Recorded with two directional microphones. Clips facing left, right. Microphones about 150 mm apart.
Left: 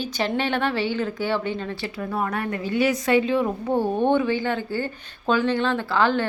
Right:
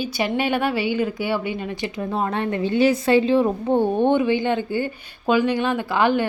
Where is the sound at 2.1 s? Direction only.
25° right (ahead or behind).